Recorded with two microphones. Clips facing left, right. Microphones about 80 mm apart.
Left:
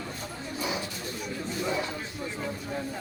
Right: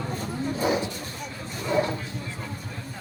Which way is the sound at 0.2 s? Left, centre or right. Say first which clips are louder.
Right 9 dB; right.